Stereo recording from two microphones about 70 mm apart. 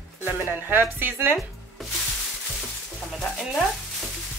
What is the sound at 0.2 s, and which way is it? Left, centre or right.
Speech, right.